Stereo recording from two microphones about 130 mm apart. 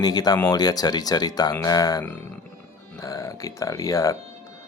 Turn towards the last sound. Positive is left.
turn(degrees=25)  # may be behind; listen again after turning